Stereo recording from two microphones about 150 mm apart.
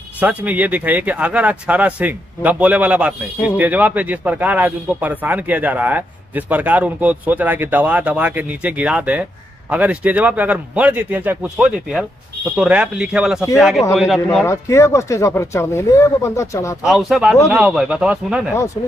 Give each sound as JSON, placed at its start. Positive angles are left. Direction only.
{"t": 0.2, "sound": "speech", "side_deg": -10}
{"t": 14.4, "sound": "speech", "side_deg": 20}
{"t": 16.8, "sound": "speech", "side_deg": 0}